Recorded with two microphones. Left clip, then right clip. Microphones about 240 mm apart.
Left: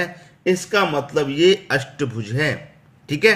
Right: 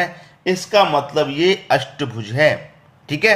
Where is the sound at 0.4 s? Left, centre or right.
Left.